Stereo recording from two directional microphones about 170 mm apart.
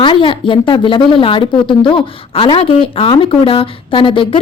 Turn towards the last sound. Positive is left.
turn(degrees=30)  # may be behind; listen again after turning